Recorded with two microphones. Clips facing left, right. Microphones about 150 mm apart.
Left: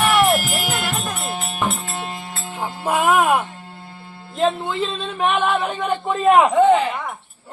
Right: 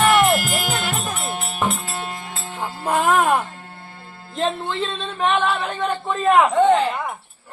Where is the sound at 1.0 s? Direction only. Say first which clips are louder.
Even; centre (ahead or behind).